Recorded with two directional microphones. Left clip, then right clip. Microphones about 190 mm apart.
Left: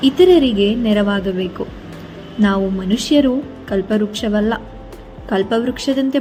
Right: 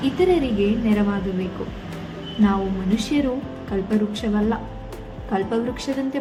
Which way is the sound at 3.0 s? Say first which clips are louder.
Left 10 dB; 25° left (ahead or behind).